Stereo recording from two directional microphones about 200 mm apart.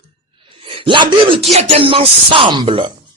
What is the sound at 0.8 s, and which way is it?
Speech, 25° right (ahead or behind).